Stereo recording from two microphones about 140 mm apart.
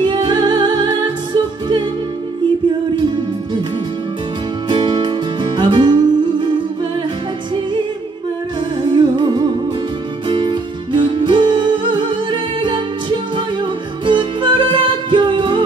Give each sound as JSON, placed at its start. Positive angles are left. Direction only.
{"t": 0.0, "sound": "music", "side_deg": -35}
{"t": 4.6, "sound": "music", "side_deg": -35}
{"t": 8.9, "sound": "music", "side_deg": -35}